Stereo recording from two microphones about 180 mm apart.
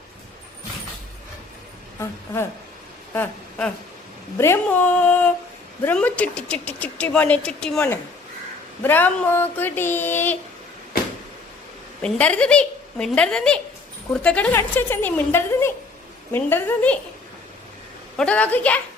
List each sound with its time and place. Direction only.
2.0 s a woman's voice: 15° left (ahead or behind)
12.0 s a woman's voice: 5° left (ahead or behind)
18.2 s a woman's voice: 5° left (ahead or behind)